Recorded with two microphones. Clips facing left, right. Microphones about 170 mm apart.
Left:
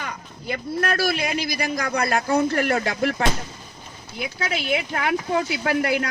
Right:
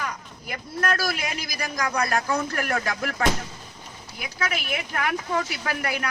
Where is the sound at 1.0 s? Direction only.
30° left (ahead or behind).